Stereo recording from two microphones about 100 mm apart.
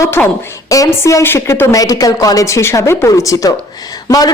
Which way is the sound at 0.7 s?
30° left (ahead or behind).